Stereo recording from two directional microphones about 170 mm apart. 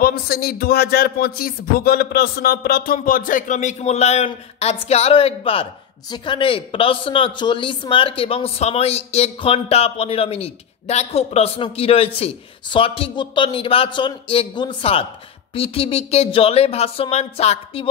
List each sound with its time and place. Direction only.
0.0 s speech: 65° left (ahead or behind); by 17.8 s 40° left (ahead or behind)